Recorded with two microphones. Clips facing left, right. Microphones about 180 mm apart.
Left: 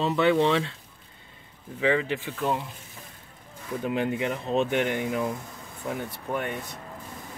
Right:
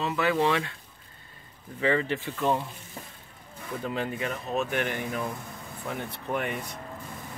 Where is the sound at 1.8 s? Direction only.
10° left (ahead or behind).